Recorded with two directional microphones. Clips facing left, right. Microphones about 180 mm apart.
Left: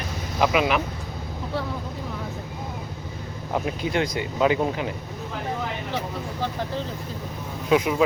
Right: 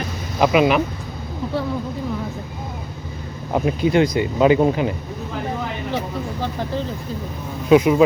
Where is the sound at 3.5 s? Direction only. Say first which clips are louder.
Right 7 dB; 10° right (ahead or behind).